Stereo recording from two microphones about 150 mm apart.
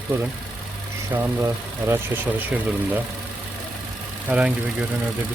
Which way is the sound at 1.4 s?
15° right (ahead or behind).